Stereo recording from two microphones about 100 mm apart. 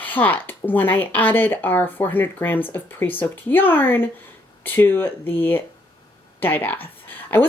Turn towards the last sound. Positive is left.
turn(degrees=20)  # may be behind; listen again after turning